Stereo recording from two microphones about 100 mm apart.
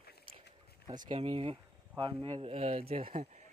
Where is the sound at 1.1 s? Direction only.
70° right (ahead or behind).